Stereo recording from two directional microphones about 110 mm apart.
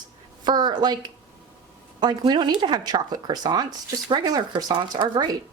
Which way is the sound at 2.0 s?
40° right (ahead or behind).